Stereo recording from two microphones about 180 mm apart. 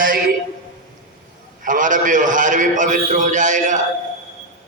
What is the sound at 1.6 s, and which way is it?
A man's voice, 45° right (ahead or behind).